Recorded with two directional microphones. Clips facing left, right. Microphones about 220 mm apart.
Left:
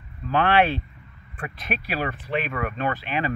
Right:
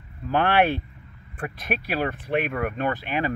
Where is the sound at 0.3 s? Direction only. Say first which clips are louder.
Even; 50° right (ahead or behind).